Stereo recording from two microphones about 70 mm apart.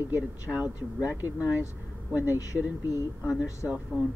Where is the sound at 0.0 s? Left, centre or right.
Right.